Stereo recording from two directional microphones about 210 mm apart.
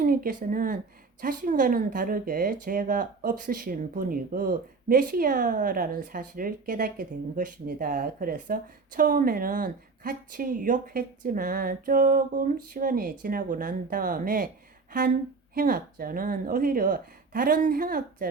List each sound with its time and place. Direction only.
0.0 s a woman's voice: 45° right (ahead or behind)
15.5 s a woman's voice: 45° right (ahead or behind)